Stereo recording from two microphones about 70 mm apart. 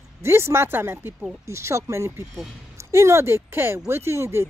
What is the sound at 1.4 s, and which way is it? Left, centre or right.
Speech, right.